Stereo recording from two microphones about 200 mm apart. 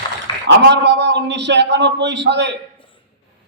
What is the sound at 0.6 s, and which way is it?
A man's voice, 60° right (ahead or behind).